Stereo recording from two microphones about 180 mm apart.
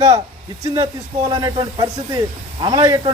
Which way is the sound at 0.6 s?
20° right (ahead or behind).